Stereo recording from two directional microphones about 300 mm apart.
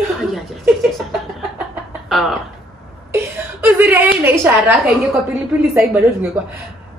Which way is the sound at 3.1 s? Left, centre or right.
Centre.